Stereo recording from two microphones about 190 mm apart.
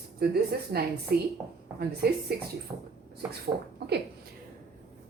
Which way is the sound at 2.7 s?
20° right (ahead or behind).